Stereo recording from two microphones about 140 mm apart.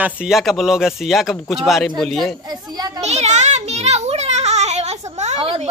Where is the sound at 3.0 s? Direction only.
50° right (ahead or behind).